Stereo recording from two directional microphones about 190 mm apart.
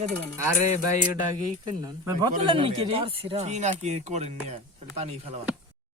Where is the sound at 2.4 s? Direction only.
25° right (ahead or behind).